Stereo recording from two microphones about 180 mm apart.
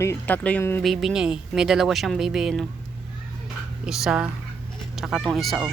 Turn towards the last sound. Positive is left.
turn(degrees=0)  # may be behind; listen again after turning